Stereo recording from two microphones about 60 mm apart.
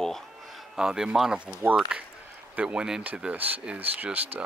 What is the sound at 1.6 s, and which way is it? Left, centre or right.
Speech, right.